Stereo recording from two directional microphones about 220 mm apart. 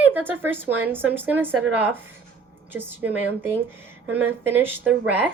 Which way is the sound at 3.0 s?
10° right (ahead or behind).